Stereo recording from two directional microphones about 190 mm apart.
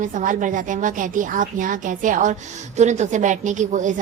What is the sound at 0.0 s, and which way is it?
A woman's voice, 45° right (ahead or behind).